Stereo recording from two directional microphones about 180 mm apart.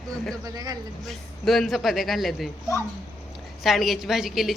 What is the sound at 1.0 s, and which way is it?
A woman's voice, centre (ahead or behind).